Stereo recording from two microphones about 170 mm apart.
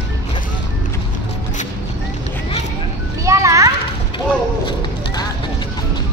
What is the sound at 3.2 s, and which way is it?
Children playing, 20° right (ahead or behind).